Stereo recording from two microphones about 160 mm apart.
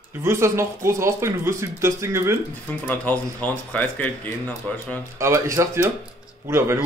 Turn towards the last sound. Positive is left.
turn(degrees=-15)  # may be behind; listen again after turning